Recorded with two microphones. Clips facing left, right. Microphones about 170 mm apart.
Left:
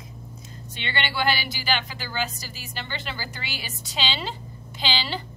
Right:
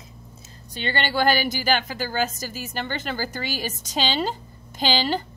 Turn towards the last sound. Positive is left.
turn(degrees=-45)  # may be behind; listen again after turning